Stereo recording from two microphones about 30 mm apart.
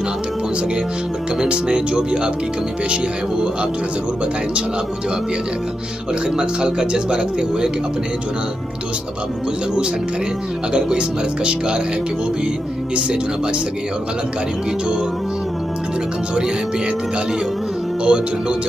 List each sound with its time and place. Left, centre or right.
1.4 s speech: right
6.3 s speech: right
10.7 s speech: right
18.0 s speech: right